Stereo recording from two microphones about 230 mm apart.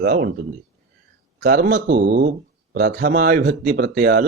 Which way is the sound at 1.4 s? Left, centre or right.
Right.